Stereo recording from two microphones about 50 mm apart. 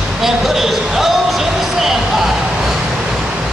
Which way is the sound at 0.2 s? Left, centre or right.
Centre.